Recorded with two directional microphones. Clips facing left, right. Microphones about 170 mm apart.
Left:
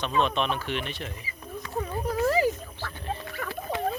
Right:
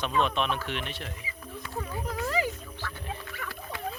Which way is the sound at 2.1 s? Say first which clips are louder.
Left 7 dB; 35° left (ahead or behind).